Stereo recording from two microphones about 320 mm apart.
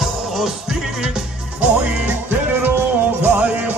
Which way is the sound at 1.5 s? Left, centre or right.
Centre.